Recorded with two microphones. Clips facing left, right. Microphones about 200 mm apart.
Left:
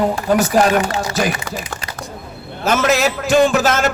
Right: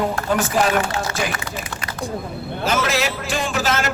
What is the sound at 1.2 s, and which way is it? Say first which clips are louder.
Speech: left 5 dB; 50° left (ahead or behind).